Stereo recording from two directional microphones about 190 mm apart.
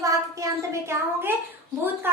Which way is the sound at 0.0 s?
15° right (ahead or behind).